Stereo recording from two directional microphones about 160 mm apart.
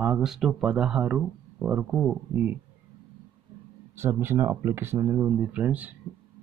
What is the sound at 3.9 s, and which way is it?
Speech, 15° right (ahead or behind).